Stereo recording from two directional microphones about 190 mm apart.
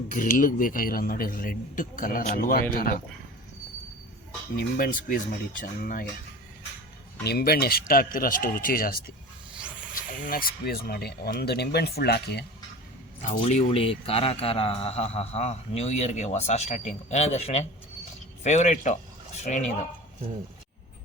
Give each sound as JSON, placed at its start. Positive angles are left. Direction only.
{"t": 0.1, "sound": "speech", "side_deg": 45}
{"t": 4.5, "sound": "speech", "side_deg": 50}
{"t": 7.3, "sound": "speech", "side_deg": 55}
{"t": 9.6, "sound": "snake", "side_deg": -5}
{"t": 9.9, "sound": "speech", "side_deg": 45}
{"t": 13.4, "sound": "a man's voice", "side_deg": 35}